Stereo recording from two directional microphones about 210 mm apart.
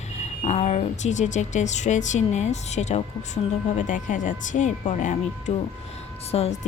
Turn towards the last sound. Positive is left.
turn(degrees=30)  # may be behind; listen again after turning